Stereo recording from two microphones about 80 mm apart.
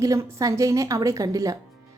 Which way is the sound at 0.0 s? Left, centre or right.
Right.